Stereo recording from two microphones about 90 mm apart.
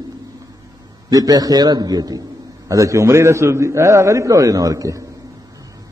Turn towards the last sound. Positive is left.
turn(degrees=-40)  # may be behind; listen again after turning